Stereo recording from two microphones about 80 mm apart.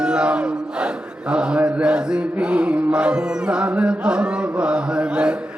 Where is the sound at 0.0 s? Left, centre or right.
Centre.